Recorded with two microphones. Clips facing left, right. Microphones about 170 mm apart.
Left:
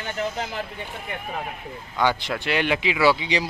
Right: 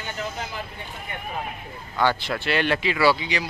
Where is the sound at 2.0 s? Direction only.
15° left (ahead or behind).